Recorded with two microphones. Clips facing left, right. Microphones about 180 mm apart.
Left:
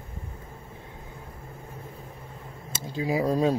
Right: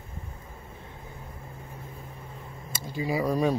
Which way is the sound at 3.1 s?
15° left (ahead or behind).